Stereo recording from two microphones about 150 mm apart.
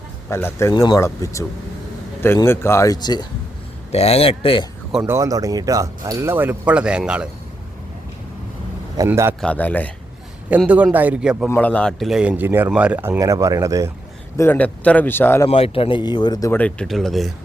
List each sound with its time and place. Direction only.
0.3 s speech: 15° left (ahead or behind)
0.7 s speech: 25° left (ahead or behind)
3.9 s speech: 40° left (ahead or behind)
5.0 s speech: 20° right (ahead or behind)
9.0 s speech: 15° right (ahead or behind)
9.4 s speech: 10° left (ahead or behind)
10.5 s speech: 10° right (ahead or behind)
11.5 s speech: 10° left (ahead or behind); by 13.9 s 20° right (ahead or behind)
14.3 s speech: 15° left (ahead or behind)
15.4 s speech: 40° left (ahead or behind)
16.5 s speech: 10° left (ahead or behind)